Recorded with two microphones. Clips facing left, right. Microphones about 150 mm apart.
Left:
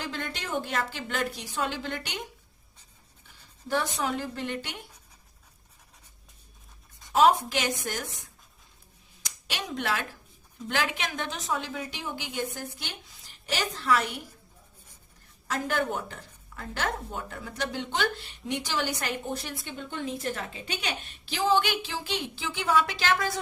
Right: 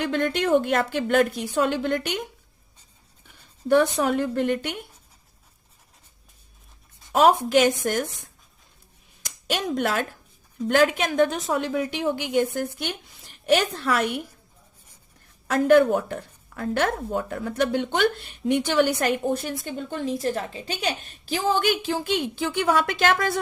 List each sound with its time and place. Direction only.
0.0 s a woman's voice: 55° right (ahead or behind)
3.7 s a woman's voice: 55° right (ahead or behind)
7.1 s a woman's voice: 55° right (ahead or behind)
9.2 s a woman's voice: 50° right (ahead or behind)
15.4 s a woman's voice: 55° right (ahead or behind)